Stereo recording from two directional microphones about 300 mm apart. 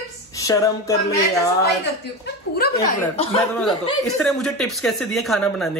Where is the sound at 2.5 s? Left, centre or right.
Left.